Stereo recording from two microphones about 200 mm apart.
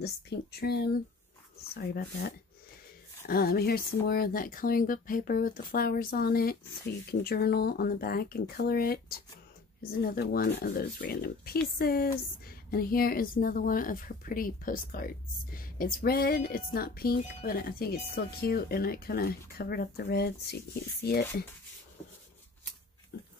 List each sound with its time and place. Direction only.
0.0 s speech: 55° left (ahead or behind)
10.0 s speech: 50° left (ahead or behind)
23.1 s pig: 50° left (ahead or behind)